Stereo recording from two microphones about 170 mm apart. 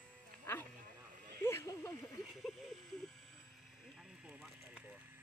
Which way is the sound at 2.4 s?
Centre (ahead or behind).